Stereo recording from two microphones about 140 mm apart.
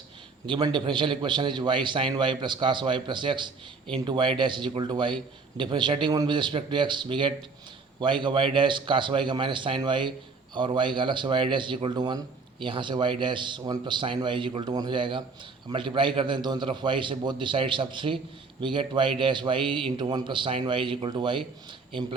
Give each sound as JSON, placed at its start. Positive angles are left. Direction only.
{"t": 0.4, "sound": "a man's voice", "side_deg": -35}